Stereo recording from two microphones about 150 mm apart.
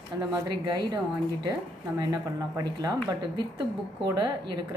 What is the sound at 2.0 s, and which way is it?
A woman's voice, 25° right (ahead or behind).